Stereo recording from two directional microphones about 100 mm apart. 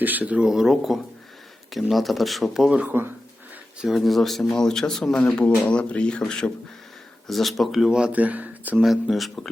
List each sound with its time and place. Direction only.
0.0 s speech: 15° right (ahead or behind)
2.7 s speech: 20° right (ahead or behind)
3.8 s speech: centre (ahead or behind)
8.8 s speech: centre (ahead or behind)